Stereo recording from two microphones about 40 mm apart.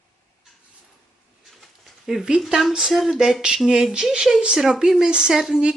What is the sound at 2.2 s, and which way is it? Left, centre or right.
Speech, right.